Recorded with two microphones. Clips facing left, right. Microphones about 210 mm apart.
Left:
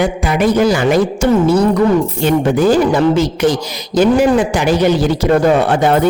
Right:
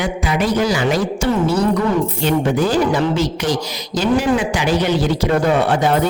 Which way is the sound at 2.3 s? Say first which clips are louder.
Left 6 dB; 50° left (ahead or behind).